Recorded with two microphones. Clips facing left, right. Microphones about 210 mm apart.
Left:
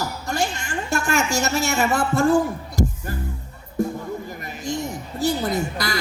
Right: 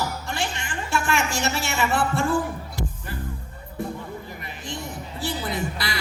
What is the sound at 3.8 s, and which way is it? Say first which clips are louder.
Music: left 7 dB; 45° left (ahead or behind).